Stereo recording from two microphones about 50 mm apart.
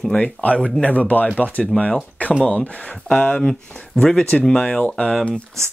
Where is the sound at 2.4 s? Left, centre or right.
Left.